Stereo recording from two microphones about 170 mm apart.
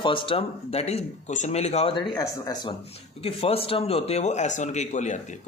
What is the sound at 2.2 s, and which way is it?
Speech, 20° left (ahead or behind).